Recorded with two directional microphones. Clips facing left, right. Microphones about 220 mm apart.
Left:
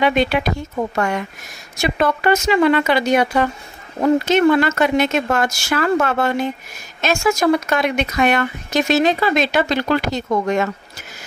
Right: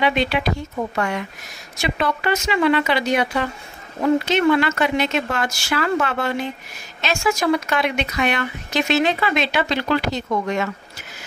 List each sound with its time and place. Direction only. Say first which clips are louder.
0.0 s a woman's voice: left 3 dB; 45° left (ahead or behind)